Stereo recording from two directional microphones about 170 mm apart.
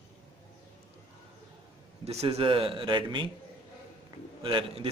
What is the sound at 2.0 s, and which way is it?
A man's voice, 40° right (ahead or behind).